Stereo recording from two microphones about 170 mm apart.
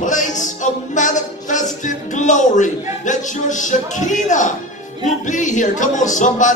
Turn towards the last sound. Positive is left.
turn(degrees=45)  # may be behind; listen again after turning